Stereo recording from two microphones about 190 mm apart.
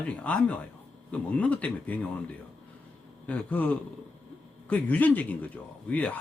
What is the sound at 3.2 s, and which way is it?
Speech, 10° left (ahead or behind).